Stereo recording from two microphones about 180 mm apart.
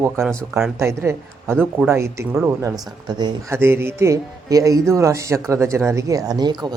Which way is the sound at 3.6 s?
15° right (ahead or behind).